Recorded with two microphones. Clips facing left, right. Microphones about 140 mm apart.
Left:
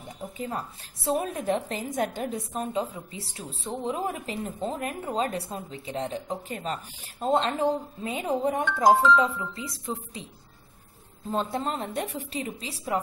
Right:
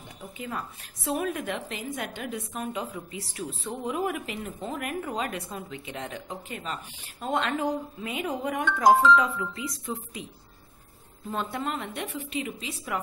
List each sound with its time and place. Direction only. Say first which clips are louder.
0.4 s speech: left 1 dB; 35° left (ahead or behind)